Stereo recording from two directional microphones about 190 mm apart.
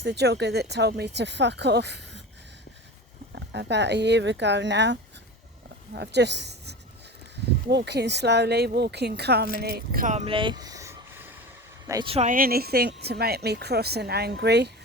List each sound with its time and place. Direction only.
0.0 s a woman's voice: 60° right (ahead or behind)
3.3 s a woman's voice: 65° right (ahead or behind); by 12.1 s 20° right (ahead or behind)
12.1 s a woman's voice: 40° right (ahead or behind); by 14.7 s 60° right (ahead or behind)